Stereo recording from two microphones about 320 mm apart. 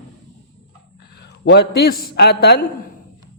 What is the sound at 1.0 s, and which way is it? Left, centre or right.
A man's voice, left.